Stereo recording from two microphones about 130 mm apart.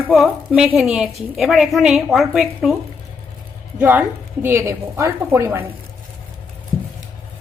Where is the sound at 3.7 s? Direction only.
15° right (ahead or behind).